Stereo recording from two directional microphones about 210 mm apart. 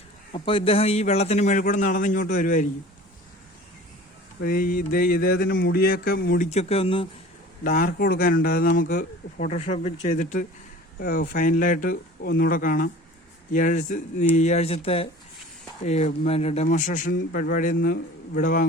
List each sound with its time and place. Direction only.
0.3 s a man's voice: 25° left (ahead or behind)
4.4 s mantra: 45° left (ahead or behind); by 7.1 s 25° left (ahead or behind)
7.6 s a man's voice: 40° left (ahead or behind)
9.6 s a man's voice: 30° left (ahead or behind)
17.7 s mantra: 55° left (ahead or behind)
18.3 s a man's voice: 40° left (ahead or behind)